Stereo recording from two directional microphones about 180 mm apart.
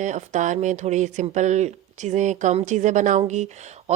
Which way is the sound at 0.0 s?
40° right (ahead or behind).